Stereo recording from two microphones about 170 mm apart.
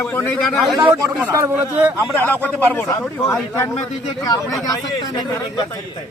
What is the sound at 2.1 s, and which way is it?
A man's voice, 10° left (ahead or behind).